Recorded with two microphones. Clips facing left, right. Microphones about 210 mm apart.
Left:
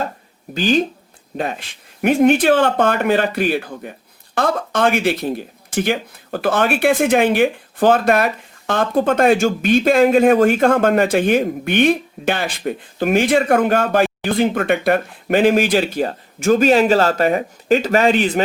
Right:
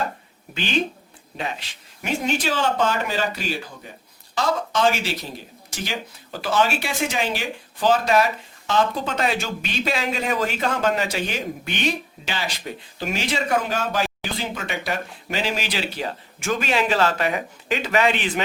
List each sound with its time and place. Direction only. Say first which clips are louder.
0.5 s speech: left 8 dB; 40° left (ahead or behind)